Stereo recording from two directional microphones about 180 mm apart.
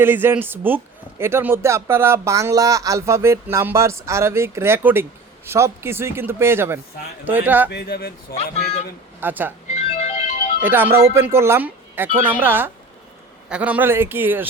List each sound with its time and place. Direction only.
0.0 s speech: 10° right (ahead or behind)
7.7 s speech: 60° left (ahead or behind)
9.2 s speech: 10° right (ahead or behind)
9.7 s music: 35° left (ahead or behind)
10.6 s speech: 10° right (ahead or behind)